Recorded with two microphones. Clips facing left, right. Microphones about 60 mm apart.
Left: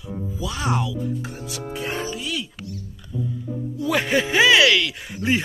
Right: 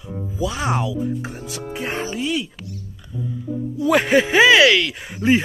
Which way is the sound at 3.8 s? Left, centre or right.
Right.